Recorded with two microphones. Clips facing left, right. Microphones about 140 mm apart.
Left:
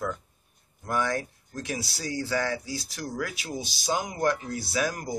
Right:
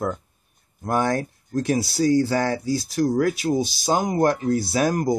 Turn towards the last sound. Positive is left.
turn(degrees=-45)  # may be behind; listen again after turning